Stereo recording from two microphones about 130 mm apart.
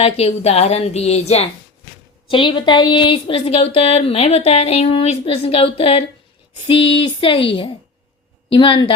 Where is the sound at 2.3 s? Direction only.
40° left (ahead or behind).